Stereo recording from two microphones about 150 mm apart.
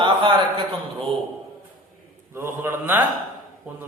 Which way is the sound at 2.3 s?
15° right (ahead or behind).